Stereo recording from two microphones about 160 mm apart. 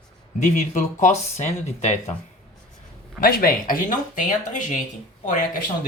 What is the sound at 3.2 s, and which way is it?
Speech, 65° left (ahead or behind).